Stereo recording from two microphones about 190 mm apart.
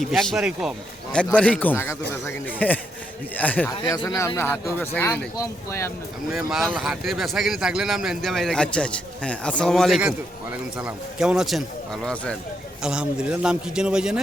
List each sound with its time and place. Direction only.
0.0 s a man's voice: centre (ahead or behind)
3.7 s a man's voice: 20° left (ahead or behind)
6.3 s speech: centre (ahead or behind)